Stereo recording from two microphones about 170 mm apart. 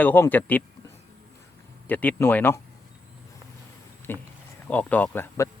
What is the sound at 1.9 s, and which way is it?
Speech, 10° left (ahead or behind).